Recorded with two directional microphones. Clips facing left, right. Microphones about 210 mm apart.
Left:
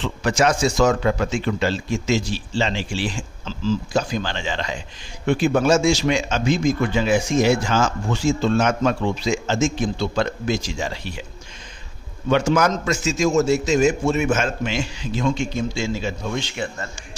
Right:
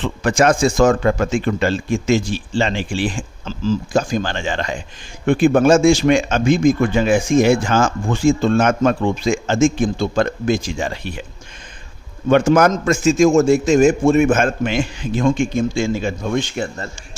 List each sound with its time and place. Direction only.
0.0 s speech: 50° right (ahead or behind)
12.3 s speech: 50° right (ahead or behind)